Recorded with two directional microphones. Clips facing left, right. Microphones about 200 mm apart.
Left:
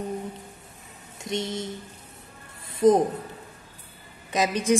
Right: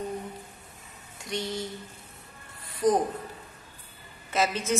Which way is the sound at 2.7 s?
25° left (ahead or behind).